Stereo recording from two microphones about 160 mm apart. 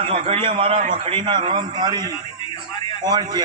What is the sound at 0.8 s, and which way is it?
Speech, 55° right (ahead or behind).